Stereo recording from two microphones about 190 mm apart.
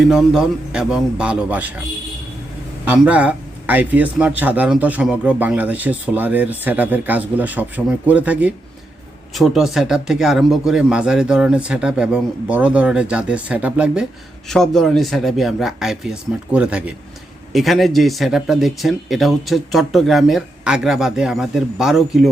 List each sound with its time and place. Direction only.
0.0 s a man's voice: 5° right (ahead or behind)
2.8 s a man's voice: 5° right (ahead or behind)